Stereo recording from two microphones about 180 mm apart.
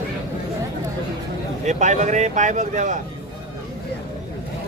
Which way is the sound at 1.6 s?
40° right (ahead or behind).